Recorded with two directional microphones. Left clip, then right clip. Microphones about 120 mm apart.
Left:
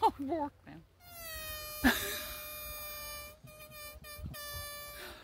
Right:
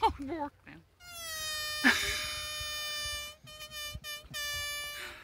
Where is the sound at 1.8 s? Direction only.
40° left (ahead or behind).